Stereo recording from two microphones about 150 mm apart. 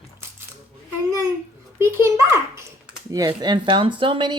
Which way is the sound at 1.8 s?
20° right (ahead or behind).